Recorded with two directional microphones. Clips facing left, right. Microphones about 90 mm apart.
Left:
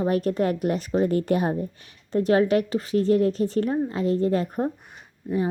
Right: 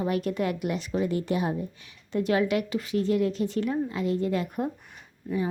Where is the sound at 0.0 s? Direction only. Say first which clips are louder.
Left 4 dB; 40° left (ahead or behind).